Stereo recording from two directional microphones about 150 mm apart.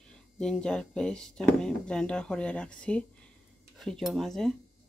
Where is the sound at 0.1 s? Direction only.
5° left (ahead or behind).